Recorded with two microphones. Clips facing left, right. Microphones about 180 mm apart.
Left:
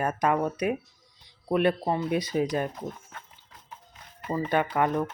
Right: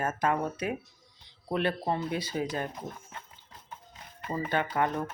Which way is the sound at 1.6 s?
15° left (ahead or behind).